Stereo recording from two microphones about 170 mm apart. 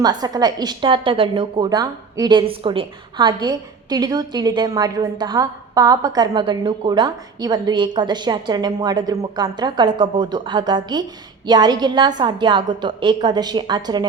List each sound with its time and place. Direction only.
0.0 s a woman's voice: 25° right (ahead or behind)